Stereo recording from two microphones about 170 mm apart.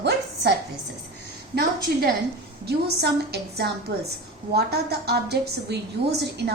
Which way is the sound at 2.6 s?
70° right (ahead or behind).